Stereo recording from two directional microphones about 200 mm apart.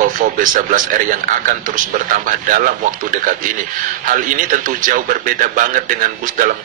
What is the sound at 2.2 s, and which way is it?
A man's voice, 45° right (ahead or behind).